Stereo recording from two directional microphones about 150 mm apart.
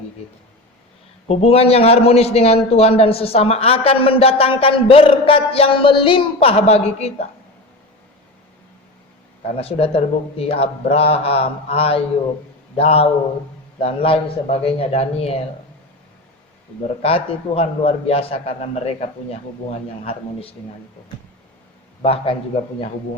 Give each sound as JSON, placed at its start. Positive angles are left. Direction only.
{"t": 1.3, "sound": "a man's voice", "side_deg": 40}
{"t": 9.6, "sound": "a man's voice", "side_deg": 40}
{"t": 17.0, "sound": "a man's voice", "side_deg": 40}
{"t": 22.0, "sound": "a man's voice", "side_deg": 40}